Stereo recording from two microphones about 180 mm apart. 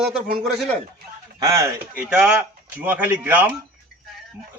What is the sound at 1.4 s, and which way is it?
Speech, 15° right (ahead or behind).